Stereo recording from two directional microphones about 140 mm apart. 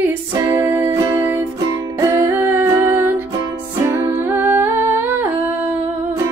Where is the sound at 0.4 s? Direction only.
15° right (ahead or behind).